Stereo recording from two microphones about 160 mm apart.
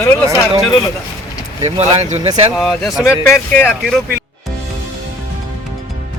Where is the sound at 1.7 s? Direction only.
40° right (ahead or behind).